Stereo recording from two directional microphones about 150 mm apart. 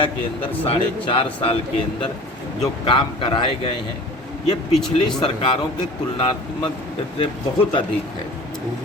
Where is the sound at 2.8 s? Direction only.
35° left (ahead or behind).